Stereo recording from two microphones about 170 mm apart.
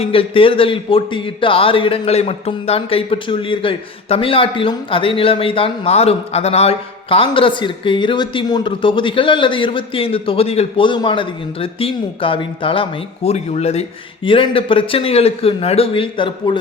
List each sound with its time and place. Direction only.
0.0 s a man's voice: 30° left (ahead or behind)